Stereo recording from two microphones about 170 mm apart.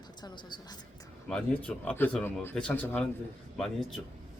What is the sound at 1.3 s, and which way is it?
Speech, 5° left (ahead or behind).